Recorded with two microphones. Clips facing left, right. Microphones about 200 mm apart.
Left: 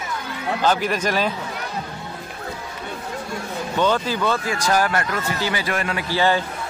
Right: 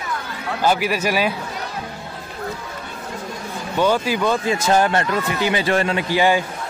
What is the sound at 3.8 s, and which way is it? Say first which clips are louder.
Speech: right 2 dB; 10° right (ahead or behind).